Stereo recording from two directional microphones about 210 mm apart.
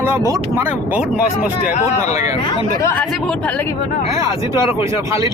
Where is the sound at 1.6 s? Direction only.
35° left (ahead or behind).